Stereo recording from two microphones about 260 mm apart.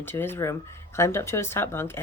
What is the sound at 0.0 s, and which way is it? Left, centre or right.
Speech, centre.